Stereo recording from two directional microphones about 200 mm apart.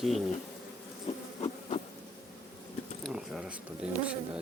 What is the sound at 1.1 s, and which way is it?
Insect, 30° left (ahead or behind).